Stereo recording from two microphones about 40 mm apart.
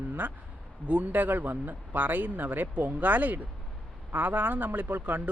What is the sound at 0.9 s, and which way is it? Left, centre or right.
Speech, right.